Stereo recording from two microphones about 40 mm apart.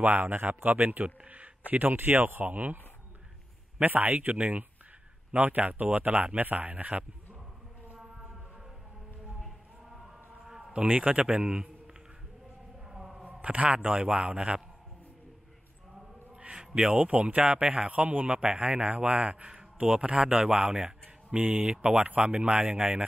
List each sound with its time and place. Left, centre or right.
0.0 s speech: right
1.7 s speech: right
2.5 s speech: right
3.8 s speech: right
9.4 s a sound: centre
10.7 s a man's voice: right
12.9 s a sound: centre
13.2 s a man's voice: right
16.5 s a man's voice: right
18.3 s a man's voice: right
21.4 s speech: right